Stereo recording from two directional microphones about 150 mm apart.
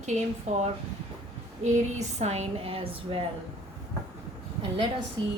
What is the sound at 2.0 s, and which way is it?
A woman's voice, 50° right (ahead or behind).